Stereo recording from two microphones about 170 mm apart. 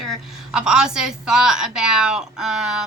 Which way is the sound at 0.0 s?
Centre (ahead or behind).